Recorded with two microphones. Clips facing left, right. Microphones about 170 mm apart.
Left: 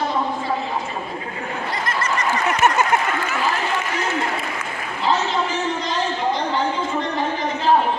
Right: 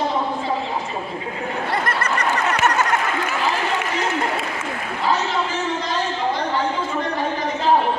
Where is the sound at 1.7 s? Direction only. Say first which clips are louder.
Right 1 dB; 60° right (ahead or behind).